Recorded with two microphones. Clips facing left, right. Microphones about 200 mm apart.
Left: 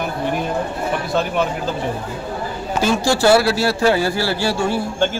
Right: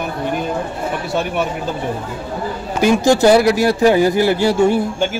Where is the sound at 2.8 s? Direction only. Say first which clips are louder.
Right 5 dB; 15° right (ahead or behind).